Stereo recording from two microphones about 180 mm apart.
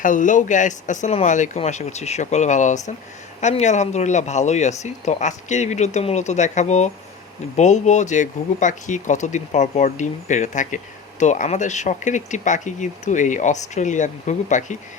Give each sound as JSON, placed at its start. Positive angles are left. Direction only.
{"t": 0.0, "sound": "speech", "side_deg": 45}